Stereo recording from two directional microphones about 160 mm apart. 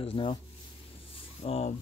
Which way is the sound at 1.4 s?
40° left (ahead or behind).